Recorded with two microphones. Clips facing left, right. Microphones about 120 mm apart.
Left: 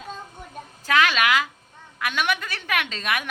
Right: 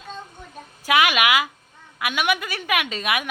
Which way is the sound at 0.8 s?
15° right (ahead or behind).